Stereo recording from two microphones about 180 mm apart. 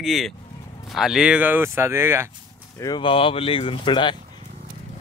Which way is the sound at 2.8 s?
25° left (ahead or behind).